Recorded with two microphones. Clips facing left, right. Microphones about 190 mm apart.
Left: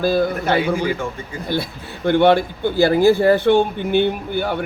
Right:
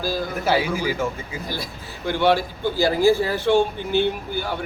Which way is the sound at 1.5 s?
60° left (ahead or behind).